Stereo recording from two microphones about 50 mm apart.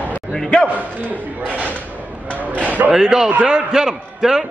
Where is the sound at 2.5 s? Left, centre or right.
Right.